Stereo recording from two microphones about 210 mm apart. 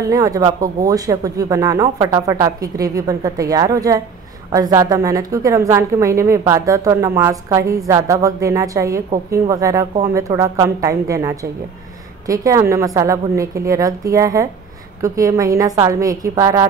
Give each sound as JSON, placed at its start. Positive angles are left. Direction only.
{"t": 0.1, "sound": "a woman's voice", "side_deg": -15}